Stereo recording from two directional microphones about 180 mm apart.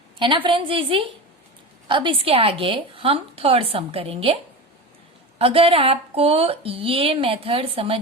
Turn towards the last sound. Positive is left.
turn(degrees=-30)  # may be behind; listen again after turning